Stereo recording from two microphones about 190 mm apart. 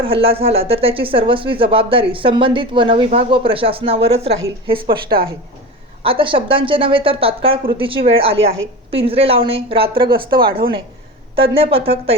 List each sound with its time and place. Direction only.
0.0 s speech: 30° right (ahead or behind)